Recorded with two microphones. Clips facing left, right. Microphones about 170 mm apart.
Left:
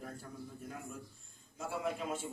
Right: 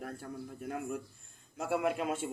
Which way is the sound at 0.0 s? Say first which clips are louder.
Right 4 dB; 65° right (ahead or behind).